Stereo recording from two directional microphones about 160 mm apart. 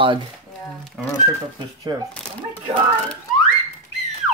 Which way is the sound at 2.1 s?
10° left (ahead or behind).